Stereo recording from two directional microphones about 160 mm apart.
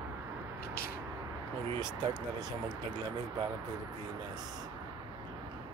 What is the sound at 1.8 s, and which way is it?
Speech, 25° right (ahead or behind).